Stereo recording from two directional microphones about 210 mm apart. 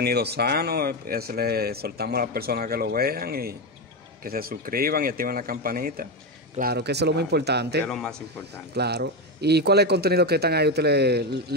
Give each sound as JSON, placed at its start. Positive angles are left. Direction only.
{"t": 0.0, "sound": "speech", "side_deg": -50}
{"t": 7.8, "sound": "a man's voice", "side_deg": 5}
{"t": 8.7, "sound": "speech", "side_deg": -50}